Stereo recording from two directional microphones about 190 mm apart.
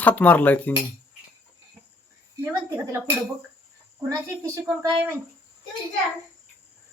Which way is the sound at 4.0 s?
15° right (ahead or behind).